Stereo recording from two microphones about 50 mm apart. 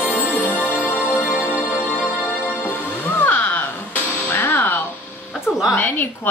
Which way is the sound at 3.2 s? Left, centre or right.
Left.